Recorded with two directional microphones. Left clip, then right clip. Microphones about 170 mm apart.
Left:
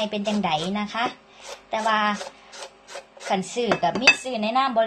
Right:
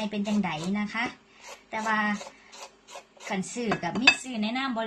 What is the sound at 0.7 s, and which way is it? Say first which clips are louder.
A woman's voice: left 5 dB; 20° right (ahead or behind).